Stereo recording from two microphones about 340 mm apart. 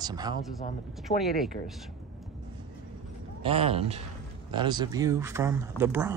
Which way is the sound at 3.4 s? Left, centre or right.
Centre.